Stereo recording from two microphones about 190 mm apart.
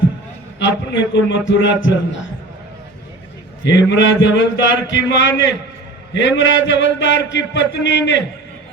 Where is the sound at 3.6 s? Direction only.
70° left (ahead or behind).